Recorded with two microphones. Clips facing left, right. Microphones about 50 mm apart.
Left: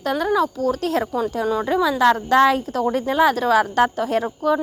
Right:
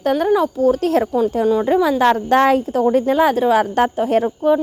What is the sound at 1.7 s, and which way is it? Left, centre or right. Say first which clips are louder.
Speech: even; right.